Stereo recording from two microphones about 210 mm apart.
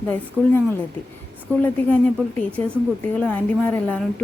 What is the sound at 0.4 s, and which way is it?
A woman's voice, centre (ahead or behind).